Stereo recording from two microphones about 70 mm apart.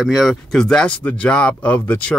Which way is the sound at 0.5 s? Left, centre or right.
Centre.